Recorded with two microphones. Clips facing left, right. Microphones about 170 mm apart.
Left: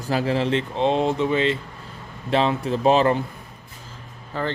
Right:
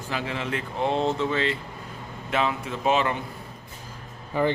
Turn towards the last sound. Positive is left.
turn(degrees=-15)  # may be behind; listen again after turning